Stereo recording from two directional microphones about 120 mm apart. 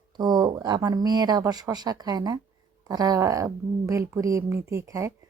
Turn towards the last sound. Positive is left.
turn(degrees=-25)  # may be behind; listen again after turning